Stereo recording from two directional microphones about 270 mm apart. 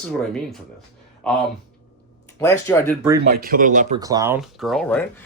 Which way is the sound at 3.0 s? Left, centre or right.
Centre.